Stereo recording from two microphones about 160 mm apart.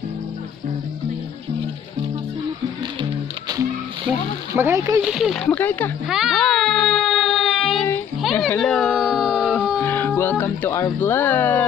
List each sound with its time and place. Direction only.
3.0 s music: 30° right (ahead or behind)
4.6 s speech: 15° right (ahead or behind)
5.0 s speech: 5° right (ahead or behind)
6.0 s a sound: 5° right (ahead or behind)
9.3 s music: 5° left (ahead or behind)
9.8 s speech: 15° left (ahead or behind)